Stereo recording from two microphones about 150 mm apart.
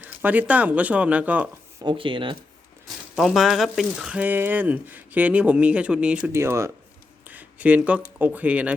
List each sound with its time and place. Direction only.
0.0 s speech: 10° right (ahead or behind)
1.8 s speech: 35° right (ahead or behind)
2.8 s speech: centre (ahead or behind)
6.3 s speech: 20° right (ahead or behind)
7.3 s a sound: 10° right (ahead or behind)
8.0 s speech: 10° right (ahead or behind)